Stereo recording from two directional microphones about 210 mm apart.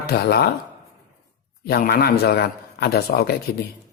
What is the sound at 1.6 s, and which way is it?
Speech, 45° left (ahead or behind).